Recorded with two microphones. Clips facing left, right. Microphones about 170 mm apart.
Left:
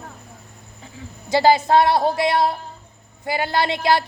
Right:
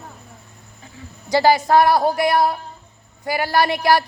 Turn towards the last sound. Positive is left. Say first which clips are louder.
# right 2 dB
turn(degrees=20)  # may be behind; listen again after turning